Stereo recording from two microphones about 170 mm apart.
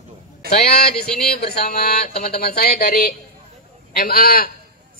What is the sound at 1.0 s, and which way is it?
Speech, 70° left (ahead or behind).